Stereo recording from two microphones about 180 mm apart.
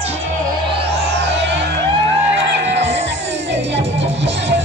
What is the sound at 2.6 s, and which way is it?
Music, 75° right (ahead or behind).